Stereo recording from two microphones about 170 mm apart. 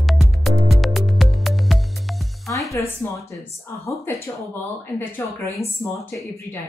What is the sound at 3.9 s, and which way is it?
Speech, 15° left (ahead or behind).